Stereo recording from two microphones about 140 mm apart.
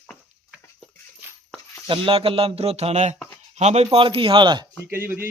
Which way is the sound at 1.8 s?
40° right (ahead or behind).